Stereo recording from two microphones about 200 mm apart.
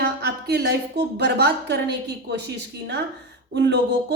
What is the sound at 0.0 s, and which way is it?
A woman's voice, 55° right (ahead or behind).